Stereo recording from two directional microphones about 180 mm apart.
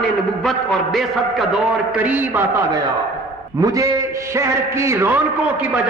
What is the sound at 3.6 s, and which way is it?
A man's voice, 20° right (ahead or behind).